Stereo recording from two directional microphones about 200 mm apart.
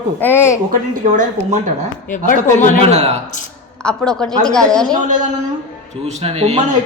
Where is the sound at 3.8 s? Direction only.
5° left (ahead or behind).